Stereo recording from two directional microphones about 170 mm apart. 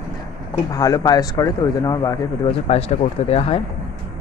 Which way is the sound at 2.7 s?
40° left (ahead or behind).